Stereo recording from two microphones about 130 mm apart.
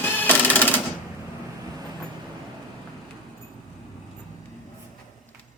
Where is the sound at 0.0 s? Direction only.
15° left (ahead or behind).